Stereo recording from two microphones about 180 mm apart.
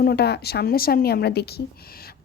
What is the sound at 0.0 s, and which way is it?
A woman's voice, 65° left (ahead or behind).